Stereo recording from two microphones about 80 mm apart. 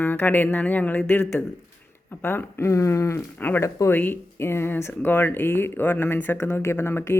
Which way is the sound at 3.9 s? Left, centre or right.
Left.